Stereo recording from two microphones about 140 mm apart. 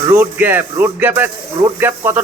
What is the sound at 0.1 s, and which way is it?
Speech, 15° right (ahead or behind).